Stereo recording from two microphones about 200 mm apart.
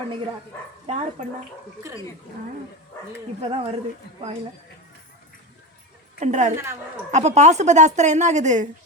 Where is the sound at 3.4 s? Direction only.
30° right (ahead or behind).